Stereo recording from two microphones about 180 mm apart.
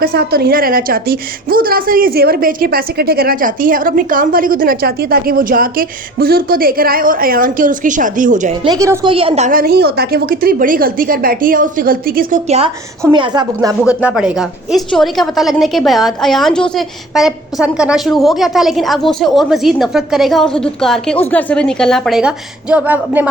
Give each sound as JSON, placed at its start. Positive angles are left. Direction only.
{"t": 0.0, "sound": "a woman's voice", "side_deg": -60}
{"t": 8.6, "sound": "speech", "side_deg": -20}
{"t": 9.0, "sound": "a woman's voice", "side_deg": -30}
{"t": 9.5, "sound": "a woman's voice", "side_deg": -55}
{"t": 12.5, "sound": "a woman's voice", "side_deg": -35}
{"t": 13.0, "sound": "a woman's voice", "side_deg": -15}
{"t": 13.8, "sound": "a woman's voice", "side_deg": -5}